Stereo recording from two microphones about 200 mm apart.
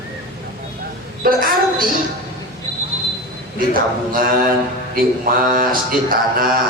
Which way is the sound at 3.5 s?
45° right (ahead or behind).